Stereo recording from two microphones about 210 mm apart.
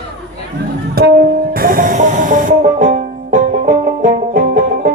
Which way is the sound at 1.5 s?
45° right (ahead or behind).